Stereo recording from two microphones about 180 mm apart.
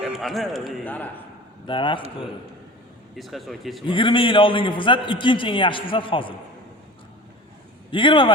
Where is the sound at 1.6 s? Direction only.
25° left (ahead or behind).